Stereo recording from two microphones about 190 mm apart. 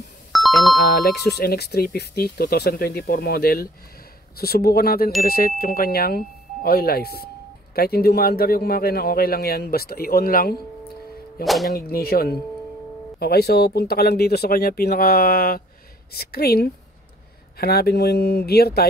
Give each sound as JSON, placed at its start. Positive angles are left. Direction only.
{"t": 0.3, "sound": "music", "side_deg": 0}
{"t": 0.9, "sound": "speech", "side_deg": 60}
{"t": 11.4, "sound": "speech", "side_deg": 0}
{"t": 11.7, "sound": "speech", "side_deg": 55}